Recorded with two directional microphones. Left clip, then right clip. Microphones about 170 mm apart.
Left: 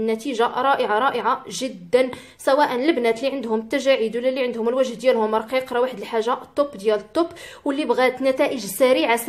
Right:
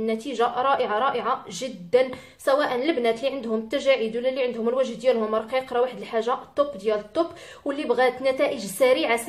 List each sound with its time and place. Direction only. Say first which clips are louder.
0.0 s a woman's voice: left 3 dB; 35° left (ahead or behind)